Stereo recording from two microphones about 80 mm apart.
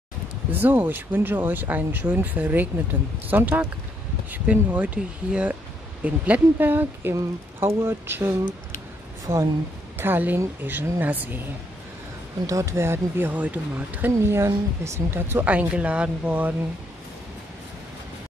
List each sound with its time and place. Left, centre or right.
0.5 s a woman's voice: right
9.9 s speech: right
12.4 s a woman's voice: right
13.4 s speech: centre
14.2 s a woman's voice: right
15.5 s speech: centre